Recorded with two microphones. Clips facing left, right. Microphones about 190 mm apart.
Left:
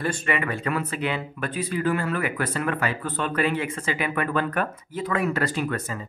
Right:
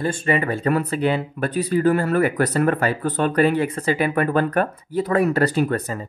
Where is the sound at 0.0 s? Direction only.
30° right (ahead or behind).